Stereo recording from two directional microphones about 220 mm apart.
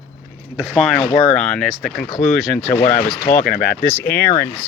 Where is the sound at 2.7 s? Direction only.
30° left (ahead or behind).